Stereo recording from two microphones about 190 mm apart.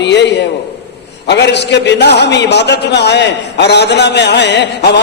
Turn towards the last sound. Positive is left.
turn(degrees=60)  # may be behind; listen again after turning